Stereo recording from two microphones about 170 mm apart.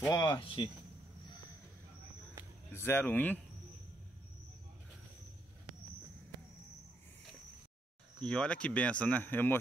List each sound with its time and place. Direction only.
0.0 s speech: 20° left (ahead or behind)
2.7 s speech: 15° left (ahead or behind)
8.2 s speech: 5° left (ahead or behind)